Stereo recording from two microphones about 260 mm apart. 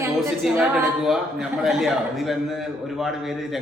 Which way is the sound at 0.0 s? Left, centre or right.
Centre.